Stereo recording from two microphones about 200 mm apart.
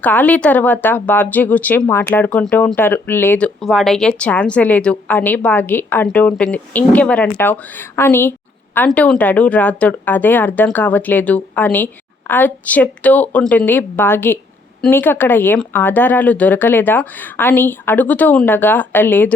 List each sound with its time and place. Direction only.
0.0 s speech: 10° left (ahead or behind)